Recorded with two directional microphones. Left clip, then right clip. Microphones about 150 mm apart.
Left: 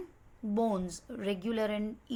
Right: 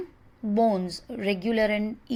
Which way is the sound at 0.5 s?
10° right (ahead or behind).